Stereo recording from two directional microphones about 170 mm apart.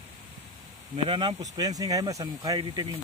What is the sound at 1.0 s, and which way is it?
Speech, 25° right (ahead or behind).